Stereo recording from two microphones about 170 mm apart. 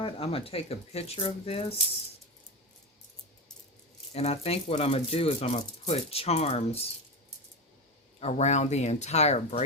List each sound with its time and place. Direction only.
0.0 s speech: 35° left (ahead or behind)
4.1 s speech: 35° left (ahead or behind)
8.2 s speech: 40° left (ahead or behind)